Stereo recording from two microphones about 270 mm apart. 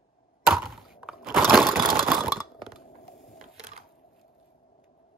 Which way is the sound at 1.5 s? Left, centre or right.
Centre.